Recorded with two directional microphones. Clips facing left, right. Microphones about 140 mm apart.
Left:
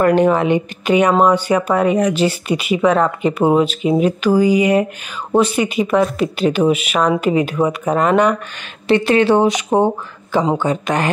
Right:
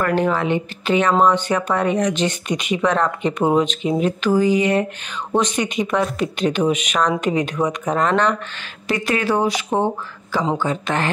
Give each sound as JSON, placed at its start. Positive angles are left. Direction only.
{"t": 0.0, "sound": "speech", "side_deg": 20}
{"t": 8.8, "sound": "speech", "side_deg": 30}